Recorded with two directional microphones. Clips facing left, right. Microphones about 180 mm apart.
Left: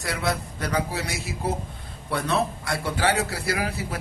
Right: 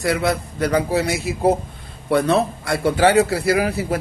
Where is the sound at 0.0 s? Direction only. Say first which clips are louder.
Right 7 dB; 60° right (ahead or behind).